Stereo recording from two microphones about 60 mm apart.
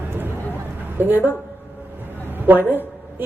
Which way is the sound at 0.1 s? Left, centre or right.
Right.